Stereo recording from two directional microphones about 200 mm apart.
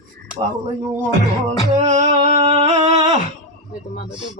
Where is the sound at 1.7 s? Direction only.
35° right (ahead or behind).